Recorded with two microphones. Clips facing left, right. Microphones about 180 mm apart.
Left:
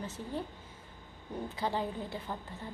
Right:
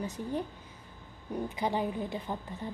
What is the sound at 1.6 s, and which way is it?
Speech, 15° right (ahead or behind).